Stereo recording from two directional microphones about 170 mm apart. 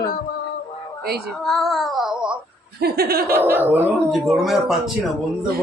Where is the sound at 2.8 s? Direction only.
65° right (ahead or behind).